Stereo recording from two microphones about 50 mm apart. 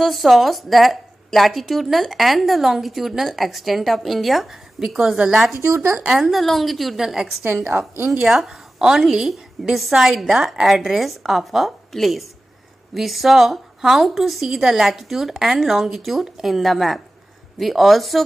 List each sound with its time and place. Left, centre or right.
0.0 s a woman's voice: centre
7.7 s a woman's voice: right
8.1 s a woman's voice: centre